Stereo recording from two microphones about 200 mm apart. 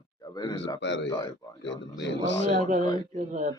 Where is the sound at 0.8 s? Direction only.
65° left (ahead or behind).